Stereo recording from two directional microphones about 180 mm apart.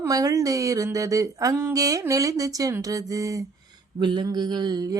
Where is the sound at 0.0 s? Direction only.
20° right (ahead or behind).